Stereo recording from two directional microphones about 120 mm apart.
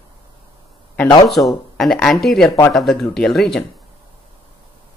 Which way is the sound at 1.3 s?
Centre (ahead or behind).